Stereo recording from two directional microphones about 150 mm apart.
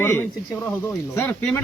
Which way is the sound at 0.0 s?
15° left (ahead or behind).